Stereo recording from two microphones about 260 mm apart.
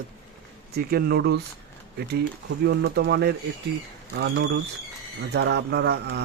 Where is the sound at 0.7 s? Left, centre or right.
Right.